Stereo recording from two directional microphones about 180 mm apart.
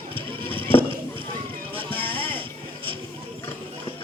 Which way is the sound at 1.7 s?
30° right (ahead or behind).